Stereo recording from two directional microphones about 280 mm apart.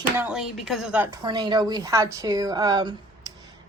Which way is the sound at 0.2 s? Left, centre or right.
Centre.